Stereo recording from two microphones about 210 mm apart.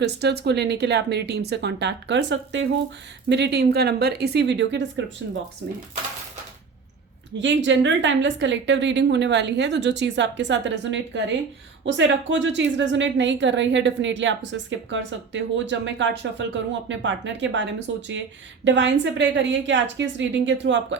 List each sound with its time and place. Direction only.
0.0 s speech: 55° right (ahead or behind)
7.3 s a woman's voice: 60° right (ahead or behind)